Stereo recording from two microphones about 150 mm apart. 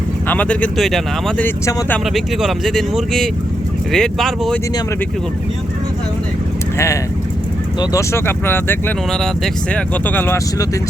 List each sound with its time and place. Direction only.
0.3 s speech: 10° left (ahead or behind)
1.4 s speech: 10° left (ahead or behind)
2.1 s speech: centre (ahead or behind)
6.7 s speech: 20° left (ahead or behind)
9.1 s speech: 5° left (ahead or behind)